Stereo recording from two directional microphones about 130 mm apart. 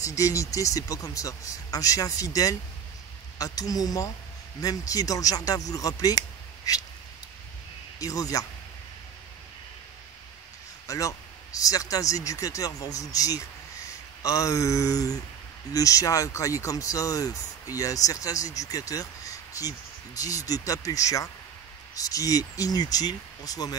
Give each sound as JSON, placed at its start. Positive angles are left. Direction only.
{"t": 0.0, "sound": "speech", "side_deg": 25}
{"t": 8.0, "sound": "speech", "side_deg": 25}
{"t": 10.9, "sound": "speech", "side_deg": 25}